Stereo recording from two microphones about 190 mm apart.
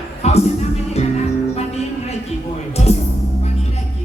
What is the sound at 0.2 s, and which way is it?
Music, 35° left (ahead or behind).